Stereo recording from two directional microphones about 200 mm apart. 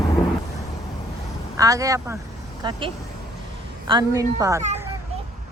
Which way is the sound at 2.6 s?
25° right (ahead or behind).